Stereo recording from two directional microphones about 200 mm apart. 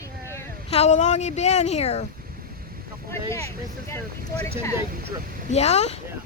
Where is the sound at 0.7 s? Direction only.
35° left (ahead or behind).